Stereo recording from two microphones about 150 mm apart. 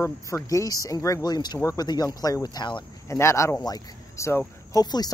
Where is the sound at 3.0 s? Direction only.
20° left (ahead or behind).